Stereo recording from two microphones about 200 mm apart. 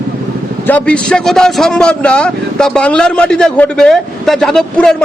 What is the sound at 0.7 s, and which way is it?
A man's voice, 5° left (ahead or behind).